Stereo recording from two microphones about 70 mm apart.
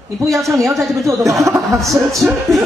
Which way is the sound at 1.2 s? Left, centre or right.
Right.